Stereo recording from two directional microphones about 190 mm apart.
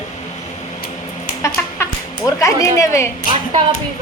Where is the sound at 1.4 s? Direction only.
15° left (ahead or behind).